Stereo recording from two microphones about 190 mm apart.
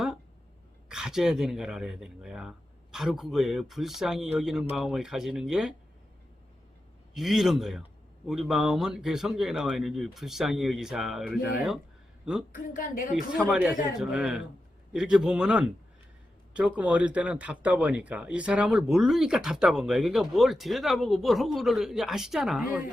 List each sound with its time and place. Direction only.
0.9 s speech: 5° right (ahead or behind)
7.1 s a woman's voice: centre (ahead or behind)
12.5 s a woman's voice: 45° left (ahead or behind)
13.3 s speech: 5° right (ahead or behind)